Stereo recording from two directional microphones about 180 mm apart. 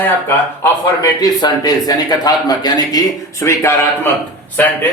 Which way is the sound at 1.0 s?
20° left (ahead or behind).